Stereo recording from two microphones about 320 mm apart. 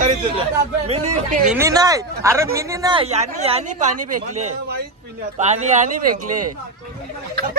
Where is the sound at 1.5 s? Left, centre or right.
Centre.